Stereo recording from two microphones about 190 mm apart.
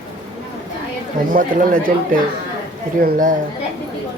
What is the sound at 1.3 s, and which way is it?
Speech, 45° right (ahead or behind).